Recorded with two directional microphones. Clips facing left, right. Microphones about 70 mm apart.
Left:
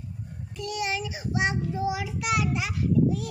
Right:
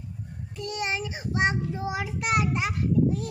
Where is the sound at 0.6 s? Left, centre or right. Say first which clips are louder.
Even; right.